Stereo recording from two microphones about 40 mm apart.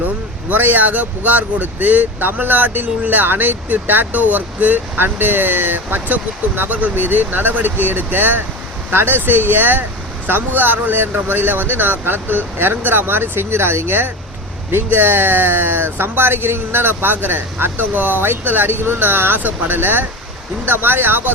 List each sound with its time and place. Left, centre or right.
0.5 s speech: right
18.9 s speech: right